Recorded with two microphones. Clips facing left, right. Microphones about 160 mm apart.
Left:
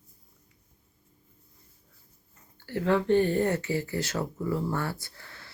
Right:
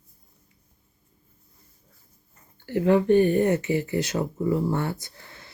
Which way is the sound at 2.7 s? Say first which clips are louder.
Right 5 dB; 15° right (ahead or behind).